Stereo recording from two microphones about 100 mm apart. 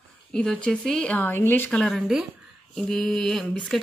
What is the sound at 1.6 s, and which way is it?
Speech, 10° left (ahead or behind).